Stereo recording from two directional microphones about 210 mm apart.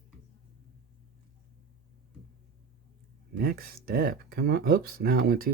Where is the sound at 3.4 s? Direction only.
45° right (ahead or behind).